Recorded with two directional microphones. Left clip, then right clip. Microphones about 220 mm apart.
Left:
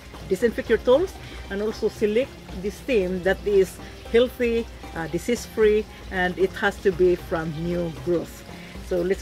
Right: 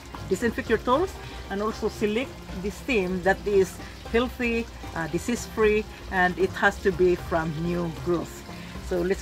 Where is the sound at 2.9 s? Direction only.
10° right (ahead or behind).